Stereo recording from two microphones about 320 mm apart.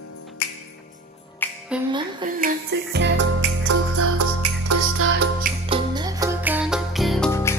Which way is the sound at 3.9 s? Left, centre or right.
Right.